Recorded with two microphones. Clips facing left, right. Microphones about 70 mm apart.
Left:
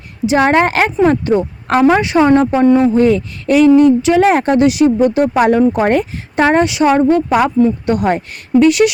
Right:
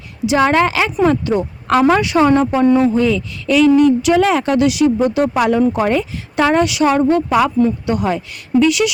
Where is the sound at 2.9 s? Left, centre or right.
Left.